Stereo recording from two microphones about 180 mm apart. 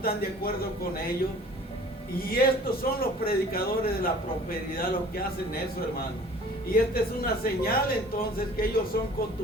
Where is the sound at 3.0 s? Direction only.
55° left (ahead or behind).